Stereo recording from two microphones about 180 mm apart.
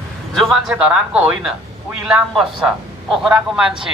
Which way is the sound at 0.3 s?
Centre (ahead or behind).